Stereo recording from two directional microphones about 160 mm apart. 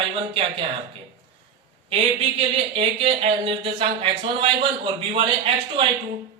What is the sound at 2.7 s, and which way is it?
Speech, 35° right (ahead or behind).